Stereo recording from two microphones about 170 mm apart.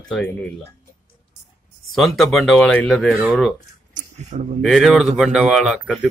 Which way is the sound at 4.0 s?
40° right (ahead or behind).